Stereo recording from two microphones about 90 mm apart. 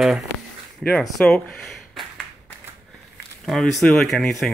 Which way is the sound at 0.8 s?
10° left (ahead or behind).